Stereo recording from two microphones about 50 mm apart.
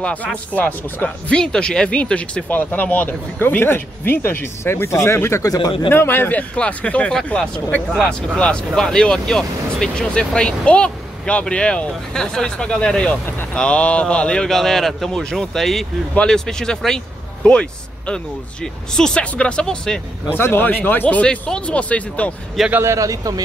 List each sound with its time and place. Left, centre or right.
0.0 s speech: left
1.3 s speech: centre
2.5 s speech: left
5.9 s speech: left
6.5 s speech: left
14.5 s a man's voice: centre
20.3 s speech: left
21.2 s speech: left
22.8 s speech: right